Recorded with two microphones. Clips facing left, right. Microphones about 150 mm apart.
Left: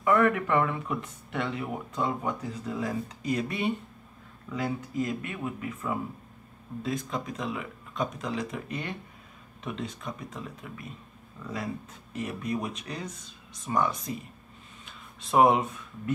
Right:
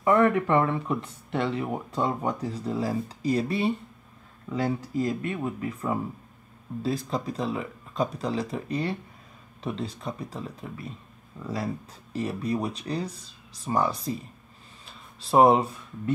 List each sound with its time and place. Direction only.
0.0 s speech: 30° right (ahead or behind)